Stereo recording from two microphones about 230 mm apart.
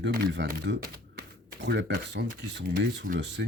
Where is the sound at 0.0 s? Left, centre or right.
Right.